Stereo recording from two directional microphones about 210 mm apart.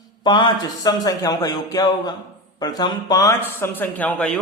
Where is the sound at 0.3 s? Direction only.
20° left (ahead or behind).